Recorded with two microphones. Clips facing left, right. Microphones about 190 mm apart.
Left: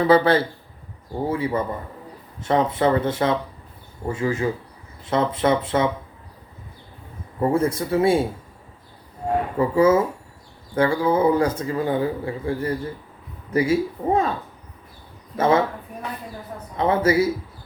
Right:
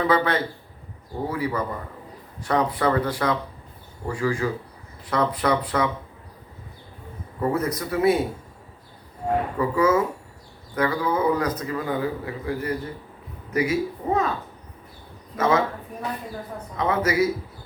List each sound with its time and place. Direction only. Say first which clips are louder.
0.1 s a man's voice: left 5 dB; 30° left (ahead or behind)
7.4 s a man's voice: left 4 dB; 30° left (ahead or behind)
9.6 s a man's voice: left 5 dB; 25° left (ahead or behind)
15.4 s a man's voice: left 3 dB; 30° left (ahead or behind)
16.7 s a man's voice: left 4 dB; 30° left (ahead or behind)